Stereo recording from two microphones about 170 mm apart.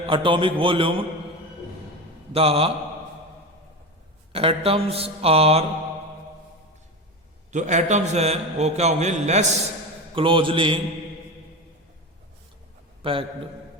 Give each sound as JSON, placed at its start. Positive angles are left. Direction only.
{"t": 0.0, "sound": "a man's voice", "side_deg": -30}
{"t": 2.3, "sound": "a man's voice", "side_deg": -35}
{"t": 4.3, "sound": "a man's voice", "side_deg": -35}
{"t": 7.5, "sound": "a man's voice", "side_deg": -45}
{"t": 10.2, "sound": "a man's voice", "side_deg": -30}
{"t": 13.0, "sound": "a man's voice", "side_deg": -30}